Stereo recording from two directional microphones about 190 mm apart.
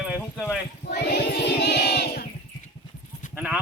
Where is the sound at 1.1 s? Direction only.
60° left (ahead or behind).